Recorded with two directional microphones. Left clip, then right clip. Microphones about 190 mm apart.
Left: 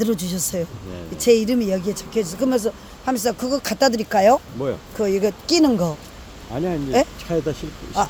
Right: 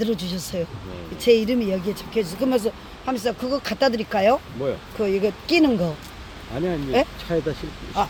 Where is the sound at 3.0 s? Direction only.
25° left (ahead or behind).